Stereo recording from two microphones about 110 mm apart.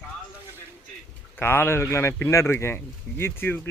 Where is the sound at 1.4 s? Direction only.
20° left (ahead or behind).